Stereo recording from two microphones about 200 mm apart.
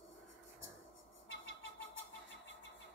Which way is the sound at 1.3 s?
70° left (ahead or behind).